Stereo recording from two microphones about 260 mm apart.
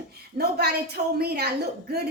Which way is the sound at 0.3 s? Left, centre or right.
Right.